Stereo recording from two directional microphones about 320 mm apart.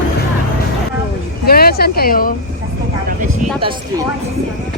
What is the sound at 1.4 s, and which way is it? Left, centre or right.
Speech, left.